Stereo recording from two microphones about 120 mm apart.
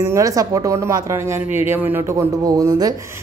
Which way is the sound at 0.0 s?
25° right (ahead or behind).